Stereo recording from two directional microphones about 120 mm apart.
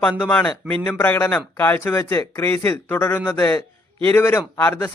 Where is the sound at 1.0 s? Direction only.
15° left (ahead or behind).